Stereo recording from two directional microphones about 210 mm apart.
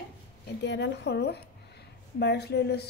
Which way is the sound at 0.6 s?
55° left (ahead or behind).